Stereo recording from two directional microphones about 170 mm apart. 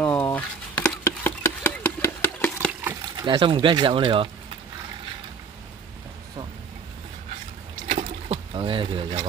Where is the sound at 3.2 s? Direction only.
30° right (ahead or behind).